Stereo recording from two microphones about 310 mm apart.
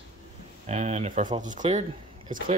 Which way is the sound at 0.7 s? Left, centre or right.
Right.